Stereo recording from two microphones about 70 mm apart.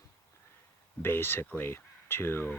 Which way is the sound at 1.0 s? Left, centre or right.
Left.